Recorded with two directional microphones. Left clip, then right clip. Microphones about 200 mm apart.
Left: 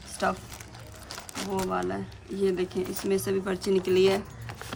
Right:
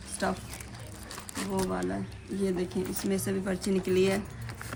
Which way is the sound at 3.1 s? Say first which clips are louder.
Left 6 dB; 30° left (ahead or behind).